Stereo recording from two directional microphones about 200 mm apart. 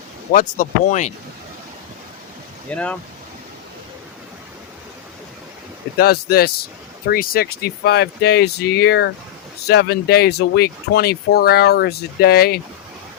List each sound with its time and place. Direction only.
0.3 s speech: 40° left (ahead or behind)
2.6 s speech: 5° left (ahead or behind)
6.0 s speech: 50° left (ahead or behind)